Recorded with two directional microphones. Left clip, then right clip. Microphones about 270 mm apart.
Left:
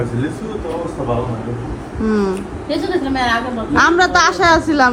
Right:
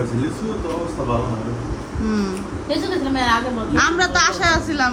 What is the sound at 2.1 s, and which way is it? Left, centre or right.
A woman's voice, centre.